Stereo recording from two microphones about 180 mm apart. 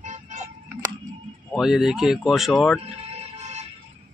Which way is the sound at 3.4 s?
40° right (ahead or behind).